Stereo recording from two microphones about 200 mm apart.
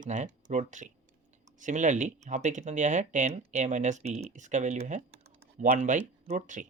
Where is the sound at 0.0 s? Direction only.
40° right (ahead or behind).